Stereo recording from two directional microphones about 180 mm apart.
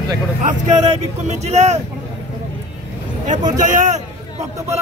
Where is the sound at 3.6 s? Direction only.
45° right (ahead or behind).